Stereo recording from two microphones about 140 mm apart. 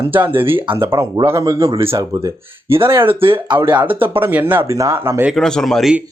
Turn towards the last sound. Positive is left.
turn(degrees=0)  # may be behind; listen again after turning